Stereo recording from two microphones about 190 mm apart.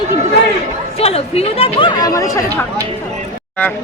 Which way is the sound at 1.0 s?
30° left (ahead or behind).